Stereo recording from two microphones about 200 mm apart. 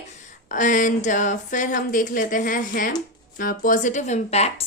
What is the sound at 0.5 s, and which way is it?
Speech, 40° left (ahead or behind).